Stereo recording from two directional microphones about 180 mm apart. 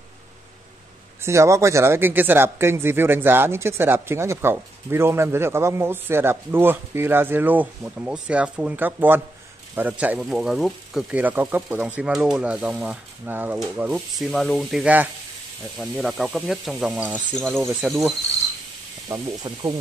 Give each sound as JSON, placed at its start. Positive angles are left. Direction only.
{"t": 1.2, "sound": "speech", "side_deg": -15}
{"t": 19.0, "sound": "speech", "side_deg": -20}